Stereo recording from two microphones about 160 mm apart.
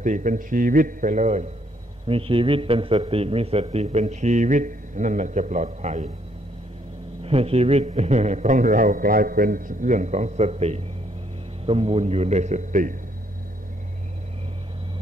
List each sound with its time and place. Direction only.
0.0 s a man's voice: 50° right (ahead or behind)
2.0 s a man's voice: 35° right (ahead or behind)
7.2 s a man's voice: 40° right (ahead or behind)